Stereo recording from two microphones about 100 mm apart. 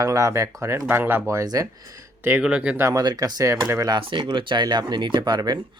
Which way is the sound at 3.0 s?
40° right (ahead or behind).